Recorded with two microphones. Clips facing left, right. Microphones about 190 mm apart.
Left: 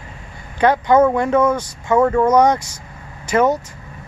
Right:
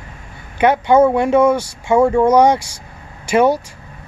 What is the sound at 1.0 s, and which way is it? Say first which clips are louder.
Speech: right 3 dB; 10° right (ahead or behind).